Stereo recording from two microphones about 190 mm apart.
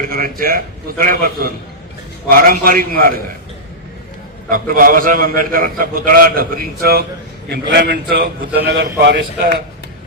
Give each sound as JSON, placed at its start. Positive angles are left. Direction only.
{"t": 0.1, "sound": "a man's voice", "side_deg": -50}
{"t": 4.4, "sound": "a man's voice", "side_deg": -50}